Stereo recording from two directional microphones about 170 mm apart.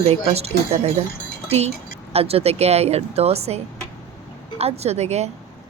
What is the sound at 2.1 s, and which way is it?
A woman's voice, 35° right (ahead or behind).